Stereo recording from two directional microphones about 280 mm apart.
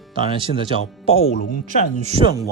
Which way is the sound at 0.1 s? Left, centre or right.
Centre.